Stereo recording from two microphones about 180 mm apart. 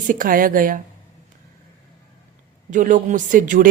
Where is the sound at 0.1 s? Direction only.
50° right (ahead or behind).